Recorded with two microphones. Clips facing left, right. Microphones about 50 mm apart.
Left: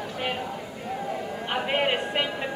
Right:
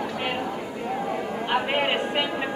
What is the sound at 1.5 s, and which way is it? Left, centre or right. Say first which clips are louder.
Speech: right 1 dB; centre.